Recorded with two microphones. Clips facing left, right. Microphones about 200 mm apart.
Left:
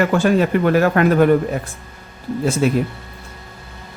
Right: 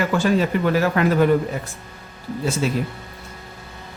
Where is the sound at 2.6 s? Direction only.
55° left (ahead or behind).